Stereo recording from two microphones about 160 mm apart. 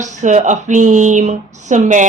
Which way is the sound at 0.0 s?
50° right (ahead or behind).